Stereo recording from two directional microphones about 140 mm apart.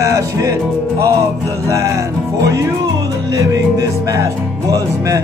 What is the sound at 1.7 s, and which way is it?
Music, 20° right (ahead or behind).